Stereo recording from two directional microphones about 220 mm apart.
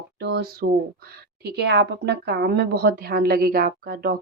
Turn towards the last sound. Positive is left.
turn(degrees=-45)  # may be behind; listen again after turning